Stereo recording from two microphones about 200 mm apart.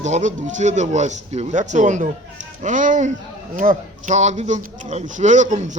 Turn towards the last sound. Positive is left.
turn(degrees=-40)  # may be behind; listen again after turning